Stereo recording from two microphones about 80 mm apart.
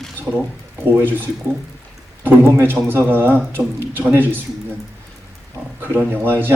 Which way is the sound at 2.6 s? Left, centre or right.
Right.